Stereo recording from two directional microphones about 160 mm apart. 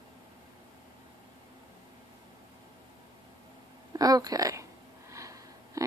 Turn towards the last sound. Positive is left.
turn(degrees=-20)  # may be behind; listen again after turning